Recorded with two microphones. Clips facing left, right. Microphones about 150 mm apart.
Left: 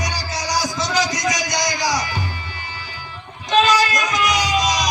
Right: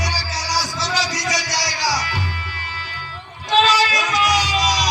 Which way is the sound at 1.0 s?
Centre (ahead or behind).